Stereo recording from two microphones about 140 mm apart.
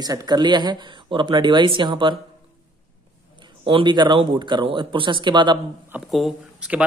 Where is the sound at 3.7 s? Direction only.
35° right (ahead or behind).